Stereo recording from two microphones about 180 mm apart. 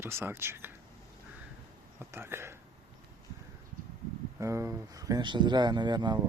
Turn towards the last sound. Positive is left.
turn(degrees=-25)  # may be behind; listen again after turning